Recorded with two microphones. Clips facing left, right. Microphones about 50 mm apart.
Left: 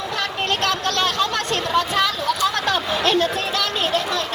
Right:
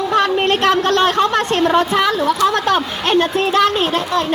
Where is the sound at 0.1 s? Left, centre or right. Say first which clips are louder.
Right 9 dB; right.